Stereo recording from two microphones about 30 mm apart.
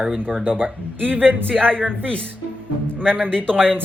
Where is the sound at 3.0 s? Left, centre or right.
Left.